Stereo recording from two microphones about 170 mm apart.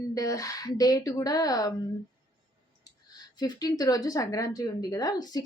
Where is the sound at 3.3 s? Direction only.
25° left (ahead or behind).